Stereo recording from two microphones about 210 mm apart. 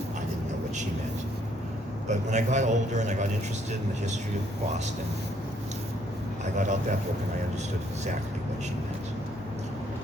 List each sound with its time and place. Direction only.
2.0 s a man's voice: 35° right (ahead or behind)
6.4 s a man's voice: 35° right (ahead or behind)